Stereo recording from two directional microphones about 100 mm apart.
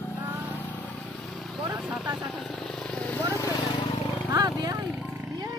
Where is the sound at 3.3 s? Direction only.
30° left (ahead or behind).